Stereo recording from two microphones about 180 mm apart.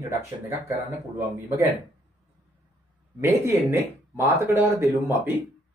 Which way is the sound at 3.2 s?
15° right (ahead or behind).